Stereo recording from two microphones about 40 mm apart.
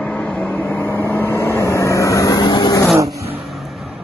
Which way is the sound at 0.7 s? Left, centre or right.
Left.